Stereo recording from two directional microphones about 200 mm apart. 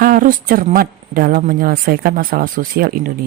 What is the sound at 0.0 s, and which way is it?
Speech, 45° right (ahead or behind).